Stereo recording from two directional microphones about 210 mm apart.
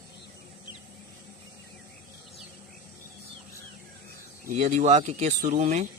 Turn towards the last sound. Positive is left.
turn(degrees=-35)  # may be behind; listen again after turning